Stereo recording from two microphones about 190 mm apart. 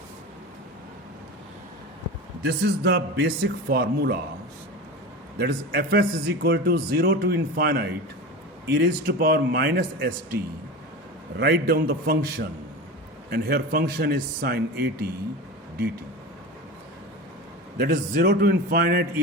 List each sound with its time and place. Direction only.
2.4 s speech: 70° right (ahead or behind)
5.4 s speech: 55° right (ahead or behind)
11.3 s a man's voice: 55° right (ahead or behind)
17.7 s speech: 50° right (ahead or behind)